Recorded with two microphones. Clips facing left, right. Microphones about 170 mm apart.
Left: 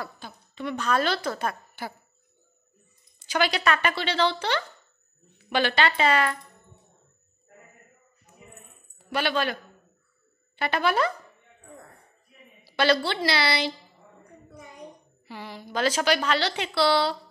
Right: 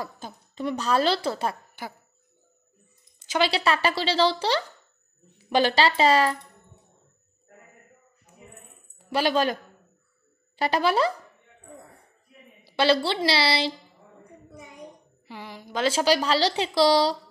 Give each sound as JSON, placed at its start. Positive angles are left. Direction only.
{"t": 0.0, "sound": "a woman's voice", "side_deg": -35}
{"t": 3.2, "sound": "a woman's voice", "side_deg": -25}
{"t": 9.1, "sound": "a woman's voice", "side_deg": -35}
{"t": 12.6, "sound": "a woman's voice", "side_deg": -30}
{"t": 15.2, "sound": "a woman's voice", "side_deg": -15}